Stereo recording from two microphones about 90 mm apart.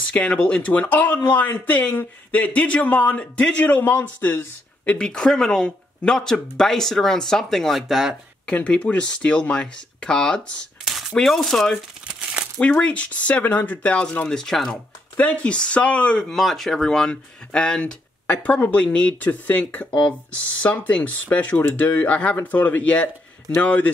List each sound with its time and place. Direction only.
0.0 s speech: 15° left (ahead or behind)
4.9 s speech: 10° left (ahead or behind)
8.5 s speech: 15° left (ahead or behind)
10.9 s cutlery: 5° right (ahead or behind)
11.1 s speech: 5° left (ahead or behind)
12.1 s crumpling: 15° right (ahead or behind)
12.5 s speech: 15° left (ahead or behind)